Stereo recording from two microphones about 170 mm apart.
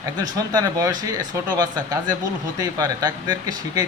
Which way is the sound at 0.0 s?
20° right (ahead or behind).